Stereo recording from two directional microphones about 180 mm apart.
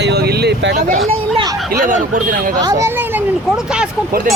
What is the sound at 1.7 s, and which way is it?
Speech, 50° right (ahead or behind).